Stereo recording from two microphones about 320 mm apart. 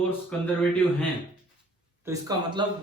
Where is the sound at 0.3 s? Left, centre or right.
Centre.